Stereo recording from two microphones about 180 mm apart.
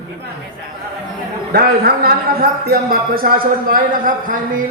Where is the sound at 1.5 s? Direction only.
55° right (ahead or behind).